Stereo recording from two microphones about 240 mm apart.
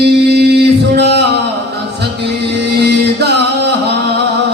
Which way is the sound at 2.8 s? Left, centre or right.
Right.